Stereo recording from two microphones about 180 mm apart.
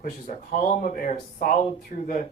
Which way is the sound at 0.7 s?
45° left (ahead or behind).